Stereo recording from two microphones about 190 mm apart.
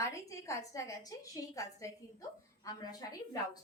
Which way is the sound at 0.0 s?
15° left (ahead or behind).